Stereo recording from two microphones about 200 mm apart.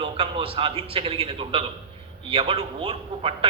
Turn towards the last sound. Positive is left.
turn(degrees=-25)  # may be behind; listen again after turning